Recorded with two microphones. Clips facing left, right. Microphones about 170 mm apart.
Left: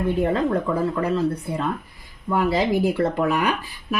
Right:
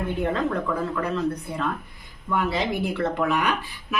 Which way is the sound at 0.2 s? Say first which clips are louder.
Left 1 dB; 30° left (ahead or behind).